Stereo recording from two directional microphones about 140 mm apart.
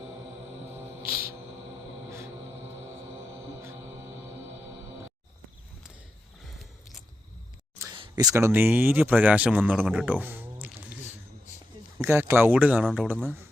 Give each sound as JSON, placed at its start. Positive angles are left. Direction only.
{"t": 0.7, "sound": "music", "side_deg": -15}
{"t": 3.3, "sound": "mantra", "side_deg": -20}
{"t": 6.4, "sound": "a sound", "side_deg": 0}
{"t": 7.8, "sound": "a sound", "side_deg": -20}
{"t": 8.2, "sound": "speech", "side_deg": -20}
{"t": 12.0, "sound": "speech", "side_deg": -15}
{"t": 12.8, "sound": "speech", "side_deg": 5}